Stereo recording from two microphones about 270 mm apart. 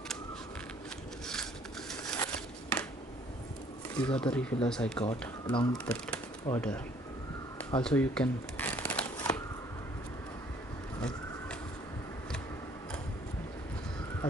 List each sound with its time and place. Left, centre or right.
1.2 s scissors: centre
3.9 s speech: centre
5.5 s speech: centre
5.9 s speech: centre
7.8 s shuffling cards: centre